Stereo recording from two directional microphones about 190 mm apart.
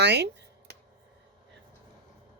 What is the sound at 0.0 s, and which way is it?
Speech, 65° right (ahead or behind).